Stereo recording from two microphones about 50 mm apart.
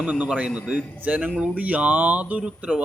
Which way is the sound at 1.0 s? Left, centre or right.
Right.